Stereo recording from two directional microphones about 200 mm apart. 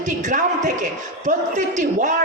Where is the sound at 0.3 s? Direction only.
40° right (ahead or behind).